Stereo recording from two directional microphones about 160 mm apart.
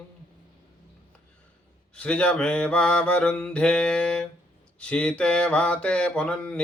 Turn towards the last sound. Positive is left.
turn(degrees=5)  # may be behind; listen again after turning